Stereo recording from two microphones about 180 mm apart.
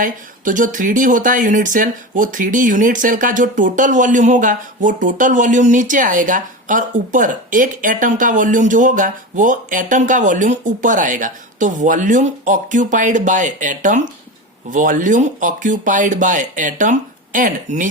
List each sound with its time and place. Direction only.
0.0 s speech: 45° right (ahead or behind)